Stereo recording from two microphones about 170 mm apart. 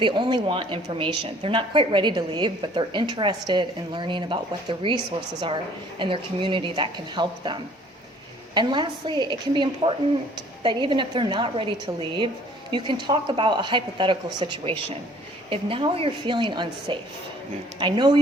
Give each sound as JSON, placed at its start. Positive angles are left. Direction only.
{"t": 0.0, "sound": "a woman's voice", "side_deg": -25}
{"t": 6.0, "sound": "a woman's voice", "side_deg": -30}